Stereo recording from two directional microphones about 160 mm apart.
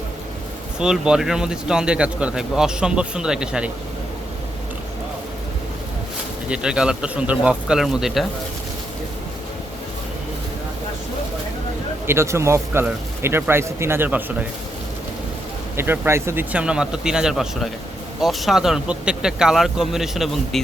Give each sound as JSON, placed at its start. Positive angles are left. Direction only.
{"t": 0.8, "sound": "a man's voice", "side_deg": -5}
{"t": 6.5, "sound": "a man's voice", "side_deg": -5}
{"t": 12.0, "sound": "speech", "side_deg": -15}
{"t": 15.7, "sound": "a man's voice", "side_deg": -15}